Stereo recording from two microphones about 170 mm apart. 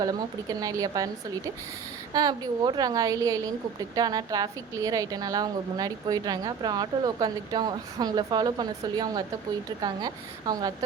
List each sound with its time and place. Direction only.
0.0 s a woman's voice: 20° right (ahead or behind)
2.1 s a woman's voice: 20° right (ahead or behind)